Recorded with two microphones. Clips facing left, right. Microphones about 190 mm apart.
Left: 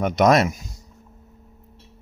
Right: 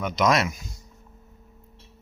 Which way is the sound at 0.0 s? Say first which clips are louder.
Left 6 dB; 50° left (ahead or behind).